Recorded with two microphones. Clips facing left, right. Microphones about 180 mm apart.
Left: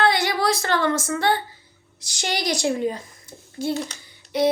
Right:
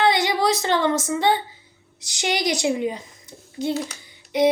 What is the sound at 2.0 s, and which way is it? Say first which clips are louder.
A woman's voice: right 3 dB; 20° right (ahead or behind).